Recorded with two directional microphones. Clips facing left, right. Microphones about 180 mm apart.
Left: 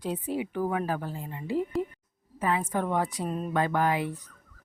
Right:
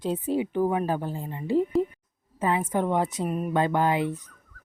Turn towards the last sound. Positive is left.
turn(degrees=-25)  # may be behind; listen again after turning